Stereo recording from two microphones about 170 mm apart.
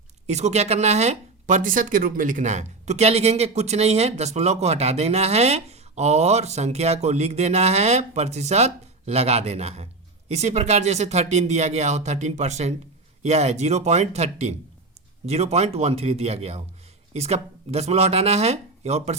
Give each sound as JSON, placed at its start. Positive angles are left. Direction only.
{"t": 0.3, "sound": "speech", "side_deg": -40}